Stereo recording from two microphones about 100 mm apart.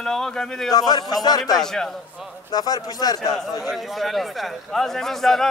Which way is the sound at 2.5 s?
40° left (ahead or behind).